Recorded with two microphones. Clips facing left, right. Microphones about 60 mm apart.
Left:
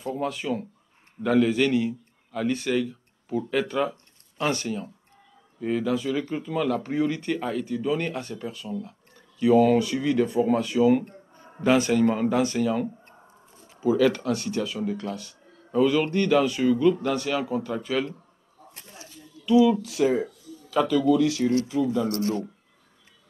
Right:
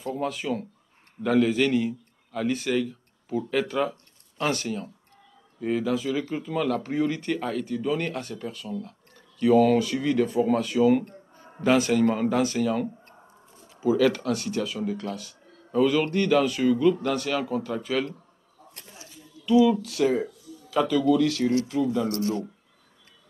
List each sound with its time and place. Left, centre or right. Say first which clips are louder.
0.0 s a man's voice: even; centre
19.6 s speech: left 1 dB; centre
22.1 s speech: left 1 dB; left